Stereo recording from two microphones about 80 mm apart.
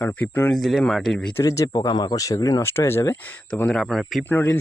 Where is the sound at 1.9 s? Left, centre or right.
Left.